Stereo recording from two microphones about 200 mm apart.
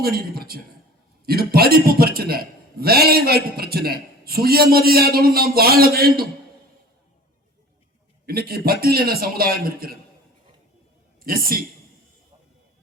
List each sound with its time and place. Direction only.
0.0 s a man's voice: 50° right (ahead or behind)
8.3 s a man's voice: 50° right (ahead or behind)
11.2 s a woman's voice: 45° right (ahead or behind)